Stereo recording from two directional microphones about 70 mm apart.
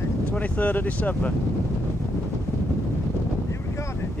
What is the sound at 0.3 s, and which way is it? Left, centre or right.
Speech, left.